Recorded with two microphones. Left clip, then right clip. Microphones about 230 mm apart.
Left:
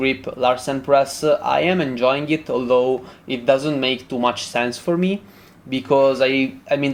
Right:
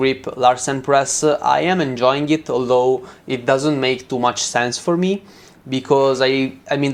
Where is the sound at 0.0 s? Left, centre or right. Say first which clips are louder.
Right 4 dB; right.